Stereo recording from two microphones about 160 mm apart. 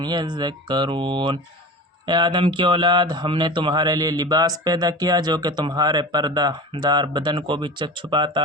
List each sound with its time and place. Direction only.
0.0 s speech: 30° right (ahead or behind)